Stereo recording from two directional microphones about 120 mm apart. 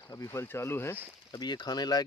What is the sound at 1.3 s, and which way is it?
Speech, 35° left (ahead or behind).